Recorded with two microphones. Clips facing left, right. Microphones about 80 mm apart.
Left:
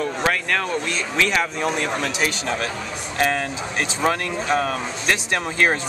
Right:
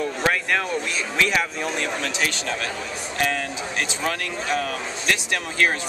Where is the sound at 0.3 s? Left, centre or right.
Centre.